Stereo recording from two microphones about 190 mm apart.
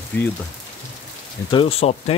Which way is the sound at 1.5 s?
30° left (ahead or behind).